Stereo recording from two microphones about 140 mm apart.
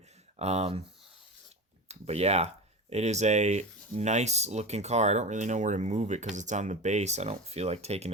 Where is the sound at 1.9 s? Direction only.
50° right (ahead or behind).